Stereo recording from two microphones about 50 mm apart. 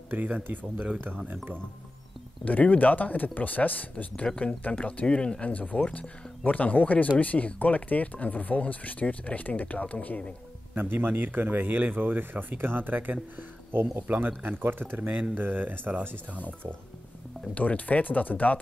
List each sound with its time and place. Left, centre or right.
0.1 s speech: right
2.4 s speech: left
4.3 s speech: centre
4.6 s speech: left
5.5 s speech: left
10.7 s speech: right
17.6 s speech: left